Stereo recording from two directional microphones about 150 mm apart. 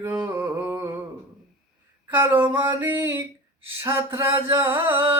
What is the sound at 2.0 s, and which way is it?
Mantra, 15° right (ahead or behind).